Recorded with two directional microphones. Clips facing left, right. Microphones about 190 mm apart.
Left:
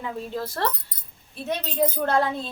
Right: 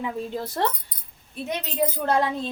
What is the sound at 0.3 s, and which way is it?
Speech, 20° right (ahead or behind).